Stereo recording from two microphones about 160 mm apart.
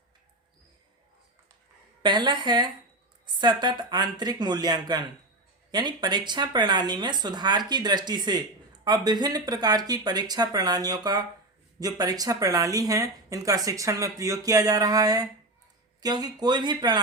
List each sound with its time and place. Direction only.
2.0 s a woman's voice: 30° right (ahead or behind)